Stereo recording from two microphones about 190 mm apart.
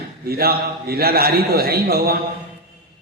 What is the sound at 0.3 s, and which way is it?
A man's voice, 55° right (ahead or behind).